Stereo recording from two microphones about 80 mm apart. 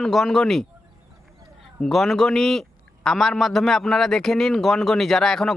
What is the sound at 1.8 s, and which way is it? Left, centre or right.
A man's voice, centre.